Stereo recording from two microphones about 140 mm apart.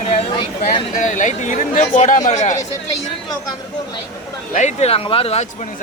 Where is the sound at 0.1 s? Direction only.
45° left (ahead or behind).